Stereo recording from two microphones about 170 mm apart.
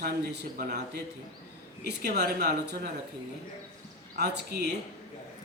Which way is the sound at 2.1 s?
75° right (ahead or behind).